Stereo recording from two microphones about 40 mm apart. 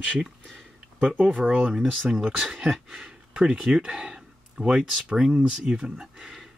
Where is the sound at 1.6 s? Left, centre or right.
Centre.